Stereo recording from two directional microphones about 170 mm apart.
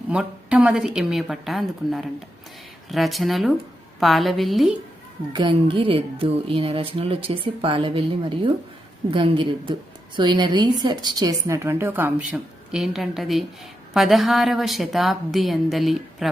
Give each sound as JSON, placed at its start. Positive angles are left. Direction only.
{"t": 0.1, "sound": "a woman's voice", "side_deg": -5}
{"t": 5.3, "sound": "a woman's voice", "side_deg": -30}